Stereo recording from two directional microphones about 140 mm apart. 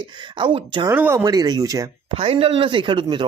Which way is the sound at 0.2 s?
35° right (ahead or behind).